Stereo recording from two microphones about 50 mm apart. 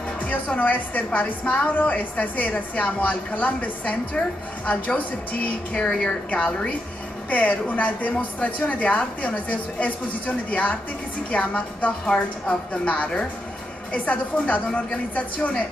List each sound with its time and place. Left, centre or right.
0.6 s a woman's voice: left
5.8 s a woman's voice: centre
7.2 s a woman's voice: left